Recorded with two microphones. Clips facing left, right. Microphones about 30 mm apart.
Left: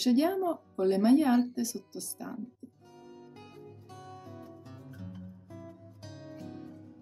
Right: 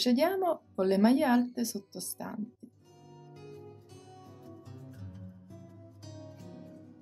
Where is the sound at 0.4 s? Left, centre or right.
Right.